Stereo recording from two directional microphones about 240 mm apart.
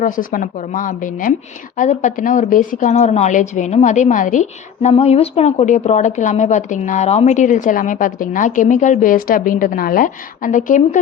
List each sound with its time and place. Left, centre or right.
0.0 s a woman's voice: left